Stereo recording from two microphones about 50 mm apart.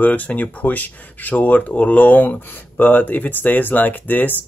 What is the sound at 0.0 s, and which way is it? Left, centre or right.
Speech, left.